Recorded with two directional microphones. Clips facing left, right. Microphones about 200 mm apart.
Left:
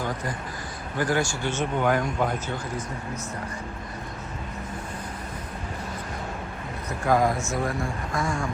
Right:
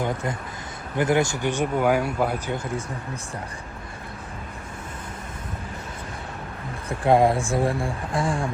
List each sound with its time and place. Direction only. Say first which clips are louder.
0.0 s speech: right 3 dB; 25° right (ahead or behind); by 2.4 s 10° right (ahead or behind)
6.8 s speech: right 4 dB; 30° right (ahead or behind)